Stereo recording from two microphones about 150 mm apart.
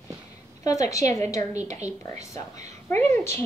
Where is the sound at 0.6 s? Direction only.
20° left (ahead or behind).